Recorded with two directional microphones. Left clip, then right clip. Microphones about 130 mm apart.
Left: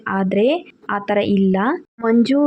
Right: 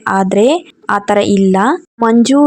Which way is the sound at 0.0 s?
40° right (ahead or behind).